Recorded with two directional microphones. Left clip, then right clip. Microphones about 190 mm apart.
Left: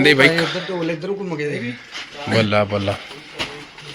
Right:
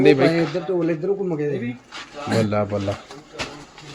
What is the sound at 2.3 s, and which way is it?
Speech, 5° right (ahead or behind).